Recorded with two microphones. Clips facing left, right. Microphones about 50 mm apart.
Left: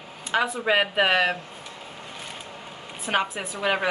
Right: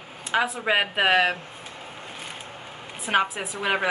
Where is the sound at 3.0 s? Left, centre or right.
Centre.